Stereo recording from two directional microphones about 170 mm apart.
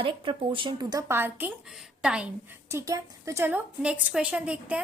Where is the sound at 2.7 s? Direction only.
15° right (ahead or behind).